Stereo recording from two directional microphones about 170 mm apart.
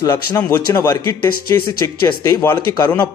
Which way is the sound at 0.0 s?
20° left (ahead or behind).